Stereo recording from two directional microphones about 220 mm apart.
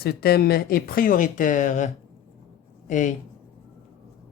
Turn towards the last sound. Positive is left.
turn(degrees=35)  # may be behind; listen again after turning